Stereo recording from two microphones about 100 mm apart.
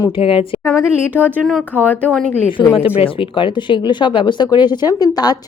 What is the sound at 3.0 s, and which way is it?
Speech, 60° left (ahead or behind).